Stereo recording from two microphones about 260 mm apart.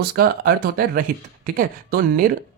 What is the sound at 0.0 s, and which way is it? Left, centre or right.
Speech, right.